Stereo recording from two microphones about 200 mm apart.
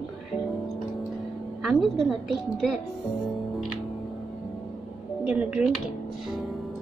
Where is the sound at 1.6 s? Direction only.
Centre (ahead or behind).